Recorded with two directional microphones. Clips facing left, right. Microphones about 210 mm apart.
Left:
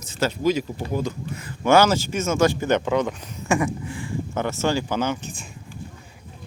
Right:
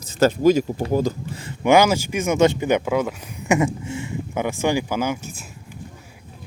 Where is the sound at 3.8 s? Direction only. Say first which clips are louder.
Right 3 dB; 25° right (ahead or behind).